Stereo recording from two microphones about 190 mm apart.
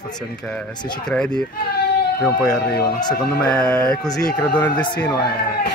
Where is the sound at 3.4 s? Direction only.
5° left (ahead or behind).